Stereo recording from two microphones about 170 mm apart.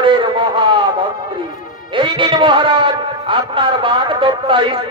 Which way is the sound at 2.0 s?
30° right (ahead or behind).